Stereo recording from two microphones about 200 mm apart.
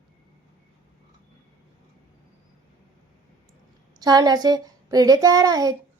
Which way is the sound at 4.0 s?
20° right (ahead or behind).